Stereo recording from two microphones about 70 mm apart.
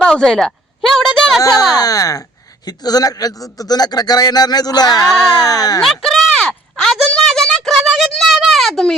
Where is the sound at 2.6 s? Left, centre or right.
Left.